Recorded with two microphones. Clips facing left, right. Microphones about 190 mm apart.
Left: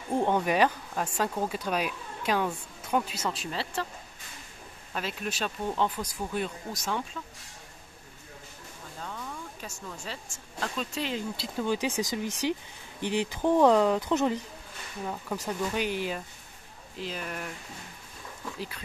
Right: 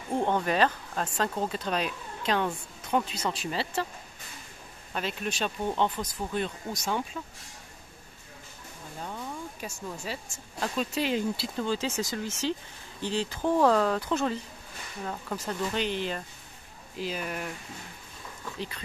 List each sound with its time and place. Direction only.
0.1 s speech: 15° left (ahead or behind); by 3.8 s centre (ahead or behind)
4.9 s speech: centre (ahead or behind)
9.0 s music: 15° right (ahead or behind)
10.6 s speech: 10° right (ahead or behind)
11.5 s speech: 15° left (ahead or behind)
17.0 s speech: 5° right (ahead or behind)